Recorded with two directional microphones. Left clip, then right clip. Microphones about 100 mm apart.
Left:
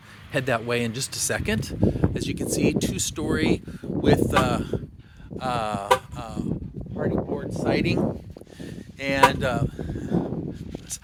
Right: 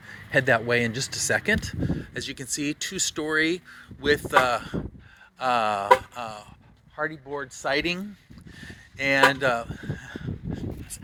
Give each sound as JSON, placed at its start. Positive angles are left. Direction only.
{"t": 0.3, "sound": "speech", "side_deg": 40}
{"t": 5.4, "sound": "a sound", "side_deg": 25}
{"t": 7.0, "sound": "speech", "side_deg": 15}
{"t": 8.6, "sound": "speech", "side_deg": 30}